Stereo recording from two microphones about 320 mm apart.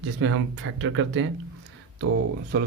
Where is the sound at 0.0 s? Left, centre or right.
Right.